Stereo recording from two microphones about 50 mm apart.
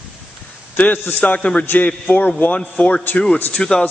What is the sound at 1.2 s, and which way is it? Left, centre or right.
Speech, left.